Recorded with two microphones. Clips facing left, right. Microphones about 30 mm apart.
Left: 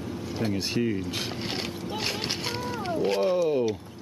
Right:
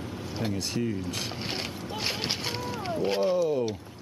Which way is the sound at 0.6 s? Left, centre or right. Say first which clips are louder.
Left 4 dB; left.